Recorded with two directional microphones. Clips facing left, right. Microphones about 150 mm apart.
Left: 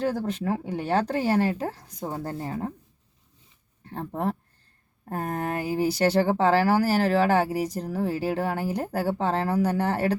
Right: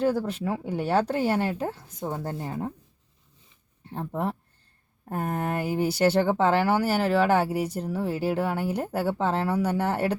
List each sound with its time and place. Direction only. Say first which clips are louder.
0.1 s speech: even; 5° right (ahead or behind)
3.9 s speech: left 1 dB; 5° right (ahead or behind)